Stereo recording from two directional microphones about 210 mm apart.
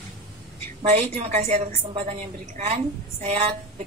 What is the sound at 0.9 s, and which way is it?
Speech, 30° right (ahead or behind).